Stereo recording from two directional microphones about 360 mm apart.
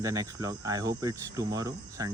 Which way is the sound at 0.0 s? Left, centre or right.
Centre.